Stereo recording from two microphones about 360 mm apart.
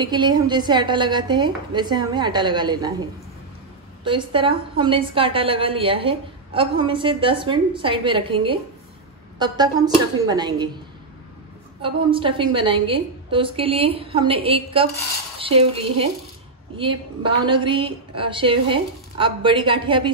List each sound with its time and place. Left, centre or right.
0.0 s a woman's voice: centre
11.8 s a woman's voice: centre